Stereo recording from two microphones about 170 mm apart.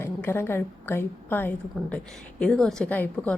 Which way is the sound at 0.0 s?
15° left (ahead or behind).